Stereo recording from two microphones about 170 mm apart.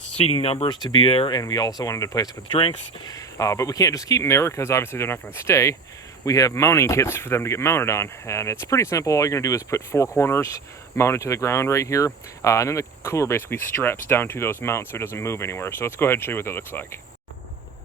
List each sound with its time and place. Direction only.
0.2 s speech: 35° left (ahead or behind)
1.4 s speech: 20° left (ahead or behind)